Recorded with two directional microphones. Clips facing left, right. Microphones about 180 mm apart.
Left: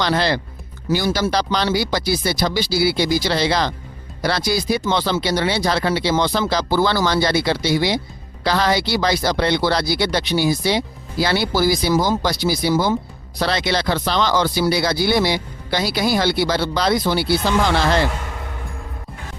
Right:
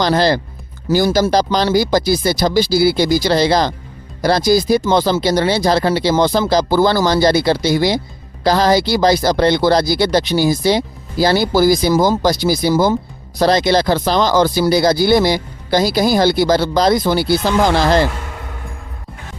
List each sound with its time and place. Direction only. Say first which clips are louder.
0.0 s speech: right 5 dB; 40° right (ahead or behind)